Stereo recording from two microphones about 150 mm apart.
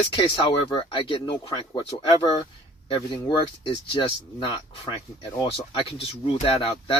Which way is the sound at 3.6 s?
35° left (ahead or behind).